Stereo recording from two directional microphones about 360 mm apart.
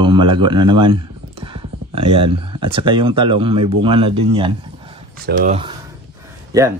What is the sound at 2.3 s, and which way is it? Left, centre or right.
Speech, centre.